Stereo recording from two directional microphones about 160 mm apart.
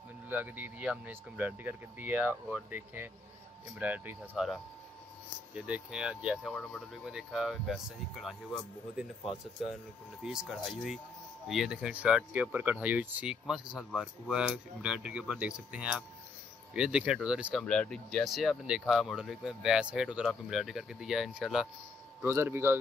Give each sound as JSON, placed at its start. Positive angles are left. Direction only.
{"t": 0.3, "sound": "speech", "side_deg": -10}
{"t": 5.5, "sound": "speech", "side_deg": -5}
{"t": 10.2, "sound": "speech", "side_deg": 0}
{"t": 17.6, "sound": "speech", "side_deg": 5}
{"t": 22.2, "sound": "speech", "side_deg": -15}